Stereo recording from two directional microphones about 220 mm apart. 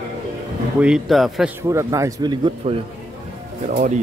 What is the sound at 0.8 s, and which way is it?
Speech, centre (ahead or behind).